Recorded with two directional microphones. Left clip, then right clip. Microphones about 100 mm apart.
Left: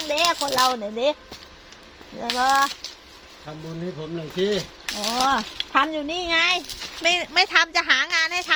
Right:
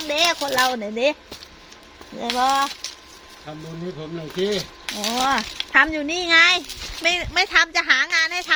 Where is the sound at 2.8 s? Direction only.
25° right (ahead or behind).